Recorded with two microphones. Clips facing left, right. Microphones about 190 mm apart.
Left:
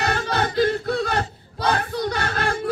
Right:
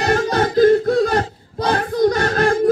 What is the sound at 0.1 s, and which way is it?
Yodeling, 45° right (ahead or behind).